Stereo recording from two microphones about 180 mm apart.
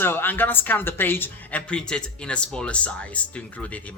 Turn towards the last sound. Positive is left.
turn(degrees=10)  # may be behind; listen again after turning